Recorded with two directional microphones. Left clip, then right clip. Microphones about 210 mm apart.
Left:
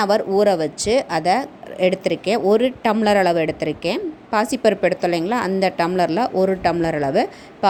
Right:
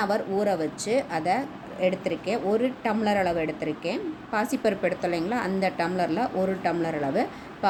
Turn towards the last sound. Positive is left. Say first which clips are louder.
# left 7 dB
turn(degrees=40)  # may be behind; listen again after turning